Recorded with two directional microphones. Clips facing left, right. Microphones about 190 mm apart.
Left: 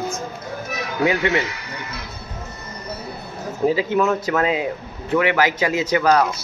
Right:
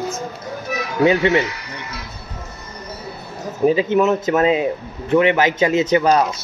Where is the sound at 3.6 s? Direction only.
20° right (ahead or behind).